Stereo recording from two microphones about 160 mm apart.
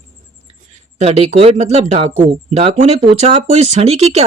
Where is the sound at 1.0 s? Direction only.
45° right (ahead or behind).